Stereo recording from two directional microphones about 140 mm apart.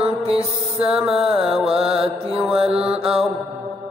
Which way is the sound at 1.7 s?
45° right (ahead or behind).